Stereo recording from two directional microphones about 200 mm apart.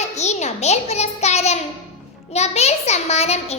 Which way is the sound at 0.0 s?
35° left (ahead or behind).